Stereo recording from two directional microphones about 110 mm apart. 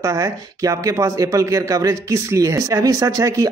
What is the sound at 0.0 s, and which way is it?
Speech, 30° right (ahead or behind).